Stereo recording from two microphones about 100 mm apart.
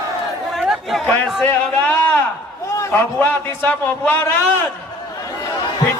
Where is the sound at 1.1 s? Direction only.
20° left (ahead or behind).